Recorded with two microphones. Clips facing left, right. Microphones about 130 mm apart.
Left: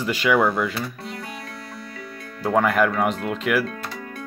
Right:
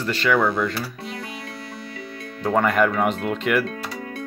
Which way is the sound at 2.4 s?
Centre (ahead or behind).